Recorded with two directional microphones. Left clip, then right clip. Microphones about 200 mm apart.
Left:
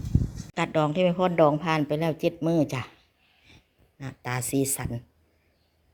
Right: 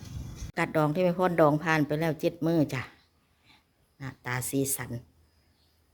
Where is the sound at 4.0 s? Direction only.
25° left (ahead or behind).